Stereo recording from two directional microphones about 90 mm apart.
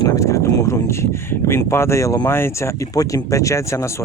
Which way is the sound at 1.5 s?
30° left (ahead or behind).